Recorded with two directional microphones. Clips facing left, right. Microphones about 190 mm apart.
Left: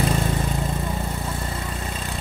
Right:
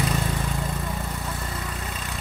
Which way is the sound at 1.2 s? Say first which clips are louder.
Left 3 dB; 25° left (ahead or behind).